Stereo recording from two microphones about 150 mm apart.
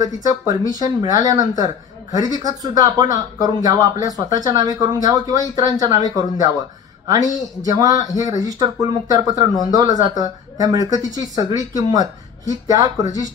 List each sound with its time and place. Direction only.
0.0 s speech: 25° right (ahead or behind)